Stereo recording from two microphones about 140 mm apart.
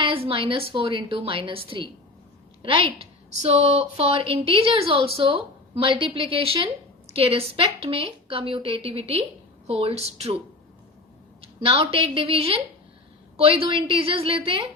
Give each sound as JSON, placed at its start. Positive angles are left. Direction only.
{"t": 0.0, "sound": "speech", "side_deg": -40}
{"t": 2.6, "sound": "a sound", "side_deg": -40}
{"t": 3.4, "sound": "a woman's voice", "side_deg": -45}
{"t": 11.3, "sound": "a woman's voice", "side_deg": -45}